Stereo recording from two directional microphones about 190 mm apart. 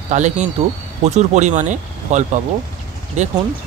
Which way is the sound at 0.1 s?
40° right (ahead or behind).